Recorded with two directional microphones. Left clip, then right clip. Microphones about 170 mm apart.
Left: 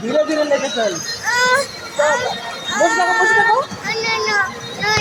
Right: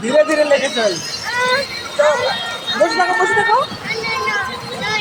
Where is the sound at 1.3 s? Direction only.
15° left (ahead or behind).